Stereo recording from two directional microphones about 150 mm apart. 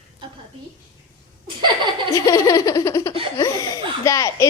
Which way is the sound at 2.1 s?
25° left (ahead or behind).